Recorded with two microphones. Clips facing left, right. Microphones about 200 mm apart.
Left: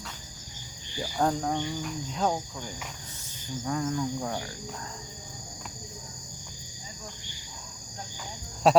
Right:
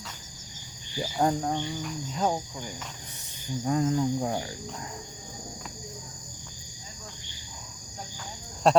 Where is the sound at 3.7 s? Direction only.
25° right (ahead or behind).